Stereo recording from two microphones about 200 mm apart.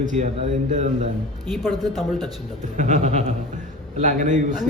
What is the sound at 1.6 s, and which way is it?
Speech, centre (ahead or behind).